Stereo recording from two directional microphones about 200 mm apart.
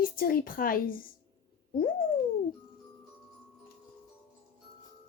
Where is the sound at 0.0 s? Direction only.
45° left (ahead or behind).